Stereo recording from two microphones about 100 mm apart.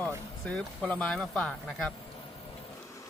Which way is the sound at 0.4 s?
10° left (ahead or behind).